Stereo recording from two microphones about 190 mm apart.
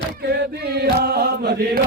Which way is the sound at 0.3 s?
60° right (ahead or behind).